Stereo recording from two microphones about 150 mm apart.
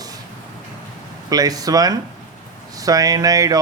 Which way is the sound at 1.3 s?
25° right (ahead or behind).